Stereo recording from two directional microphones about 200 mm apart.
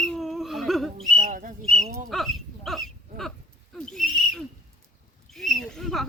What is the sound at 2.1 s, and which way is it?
Speech, centre (ahead or behind).